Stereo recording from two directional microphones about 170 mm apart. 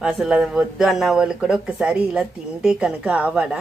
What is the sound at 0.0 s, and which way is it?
Speech, 5° right (ahead or behind).